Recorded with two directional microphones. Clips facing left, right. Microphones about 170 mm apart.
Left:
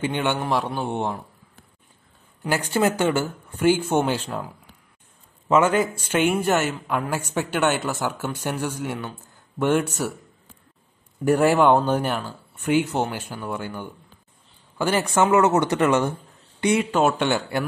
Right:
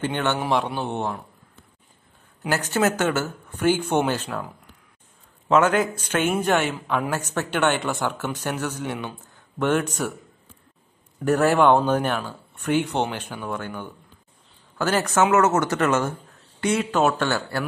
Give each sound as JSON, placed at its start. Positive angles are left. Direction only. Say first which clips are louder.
{"t": 0.0, "sound": "a man's voice", "louder": "even", "side_deg": 10}
{"t": 2.5, "sound": "speech", "louder": "left 1 dB", "side_deg": 10}
{"t": 6.0, "sound": "a man's voice", "louder": "left 1 dB", "side_deg": 10}
{"t": 11.2, "sound": "speech", "louder": "left 1 dB", "side_deg": 10}